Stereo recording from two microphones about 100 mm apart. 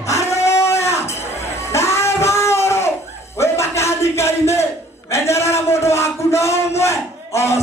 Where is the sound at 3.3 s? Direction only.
25° left (ahead or behind).